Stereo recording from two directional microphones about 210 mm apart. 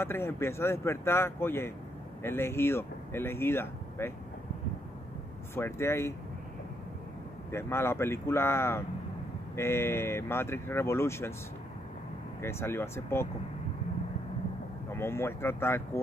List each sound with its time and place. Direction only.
0.0 s speech: 10° left (ahead or behind)
5.5 s speech: 10° left (ahead or behind)
7.5 s speech: 10° left (ahead or behind)
12.4 s speech: 10° left (ahead or behind)
15.0 s speech: 10° left (ahead or behind)